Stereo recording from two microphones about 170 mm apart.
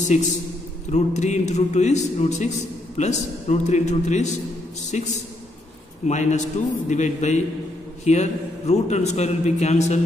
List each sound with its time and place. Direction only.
0.0 s a man's voice: 45° left (ahead or behind)